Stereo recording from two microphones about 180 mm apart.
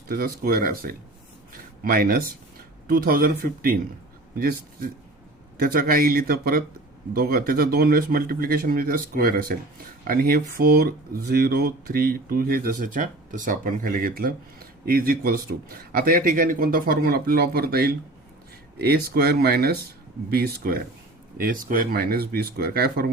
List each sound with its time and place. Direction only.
0.1 s speech: 55° right (ahead or behind)